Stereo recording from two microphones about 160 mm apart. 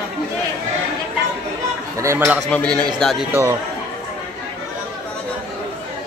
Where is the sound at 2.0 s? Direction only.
15° right (ahead or behind).